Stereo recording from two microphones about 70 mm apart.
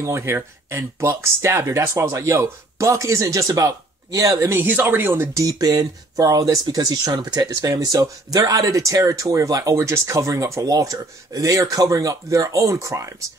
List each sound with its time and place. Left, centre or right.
0.0 s speech: right
4.6 s speech: right
5.3 s speech: right